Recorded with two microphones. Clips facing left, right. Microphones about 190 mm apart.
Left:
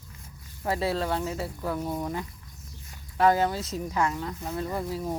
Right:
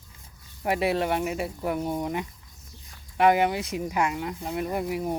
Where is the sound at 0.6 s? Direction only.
20° right (ahead or behind).